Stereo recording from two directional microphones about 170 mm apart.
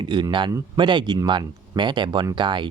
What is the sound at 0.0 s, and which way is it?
Speech, 25° right (ahead or behind).